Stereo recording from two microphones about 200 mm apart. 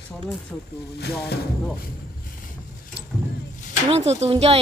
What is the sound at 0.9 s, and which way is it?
Speech, 55° left (ahead or behind).